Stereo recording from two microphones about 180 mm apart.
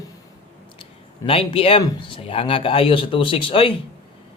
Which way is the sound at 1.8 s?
30° left (ahead or behind).